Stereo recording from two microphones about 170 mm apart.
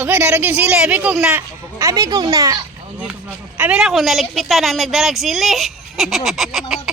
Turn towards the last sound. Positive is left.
turn(degrees=0)  # may be behind; listen again after turning